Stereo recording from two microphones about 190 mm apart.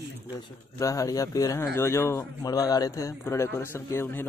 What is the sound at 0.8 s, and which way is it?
A man's voice, 15° left (ahead or behind).